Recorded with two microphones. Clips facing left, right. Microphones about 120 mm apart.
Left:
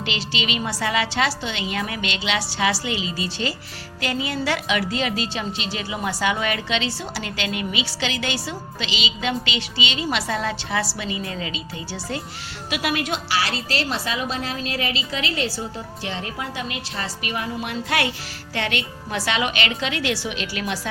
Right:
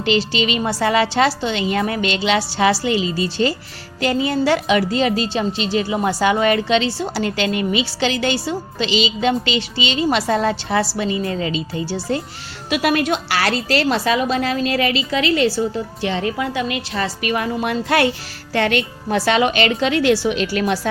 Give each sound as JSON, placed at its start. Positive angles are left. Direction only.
{"t": 0.0, "sound": "a woman's voice", "side_deg": -40}